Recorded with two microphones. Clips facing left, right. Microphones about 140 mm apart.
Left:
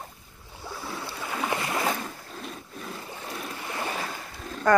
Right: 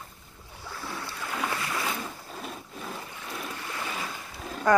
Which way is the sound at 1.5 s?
30° left (ahead or behind).